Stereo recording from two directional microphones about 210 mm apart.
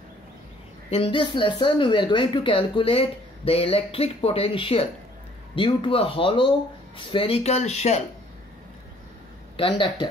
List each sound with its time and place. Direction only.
0.8 s speech: 25° left (ahead or behind)
9.6 s speech: 25° left (ahead or behind)